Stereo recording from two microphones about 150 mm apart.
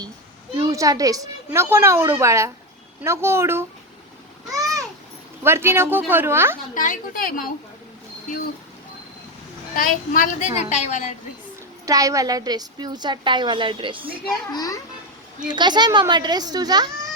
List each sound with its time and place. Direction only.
0.5 s a woman's voice: 25° right (ahead or behind)
5.4 s speech: 15° right (ahead or behind)
6.7 s a woman's voice: 65° left (ahead or behind)
9.7 s a woman's voice: 65° left (ahead or behind)
11.9 s a woman's voice: 20° right (ahead or behind)
14.5 s a child's voice: 25° left (ahead or behind)
15.4 s a woman's voice: 30° right (ahead or behind)